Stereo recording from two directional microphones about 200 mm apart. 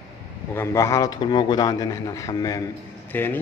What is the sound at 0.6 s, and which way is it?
A man's voice, 15° left (ahead or behind).